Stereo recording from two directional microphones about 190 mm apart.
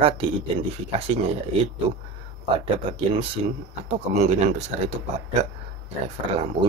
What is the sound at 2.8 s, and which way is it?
Speech, 30° right (ahead or behind).